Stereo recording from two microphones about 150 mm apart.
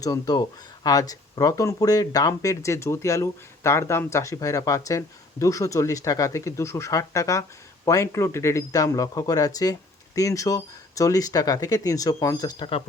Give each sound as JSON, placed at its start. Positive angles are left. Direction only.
{"t": 0.0, "sound": "speech", "side_deg": 25}